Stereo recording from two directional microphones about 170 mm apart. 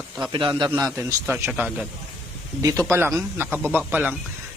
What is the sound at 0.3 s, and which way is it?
Speech, 30° right (ahead or behind).